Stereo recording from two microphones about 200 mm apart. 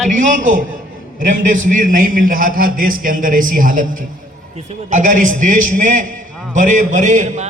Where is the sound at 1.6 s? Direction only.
45° right (ahead or behind).